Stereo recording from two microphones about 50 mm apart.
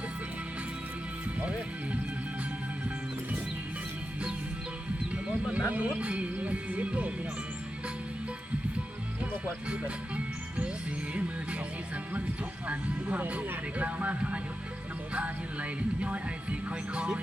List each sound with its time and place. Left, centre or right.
5.5 s a sound: centre
5.7 s speech: right
12.6 s speech: right
16.0 s speech: right